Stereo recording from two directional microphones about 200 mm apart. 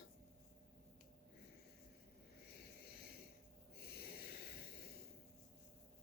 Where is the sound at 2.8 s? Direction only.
50° left (ahead or behind).